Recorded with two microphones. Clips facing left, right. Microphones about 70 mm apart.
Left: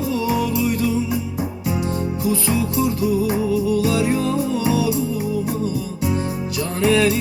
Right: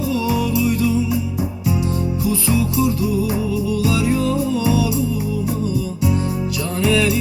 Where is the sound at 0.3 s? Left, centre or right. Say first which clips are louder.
Right 1 dB; left.